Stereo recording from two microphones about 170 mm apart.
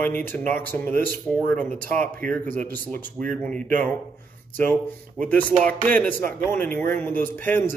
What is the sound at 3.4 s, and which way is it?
Speech, 5° left (ahead or behind).